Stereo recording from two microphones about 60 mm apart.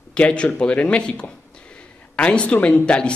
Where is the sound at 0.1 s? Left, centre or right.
Centre.